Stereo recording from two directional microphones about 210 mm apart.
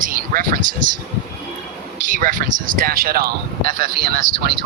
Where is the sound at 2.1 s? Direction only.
40° right (ahead or behind).